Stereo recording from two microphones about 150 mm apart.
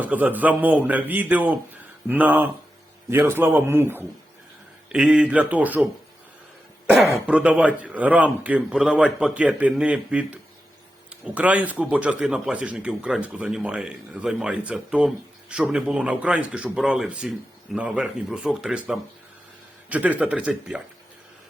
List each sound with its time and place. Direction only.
0.0 s speech: 10° right (ahead or behind)
11.3 s speech: 10° right (ahead or behind)